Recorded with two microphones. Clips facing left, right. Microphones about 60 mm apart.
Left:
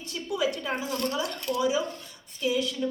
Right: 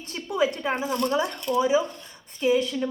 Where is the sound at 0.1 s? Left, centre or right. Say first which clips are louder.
Right 4 dB; right.